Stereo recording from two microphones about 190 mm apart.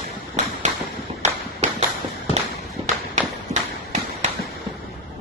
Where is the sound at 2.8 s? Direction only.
30° right (ahead or behind).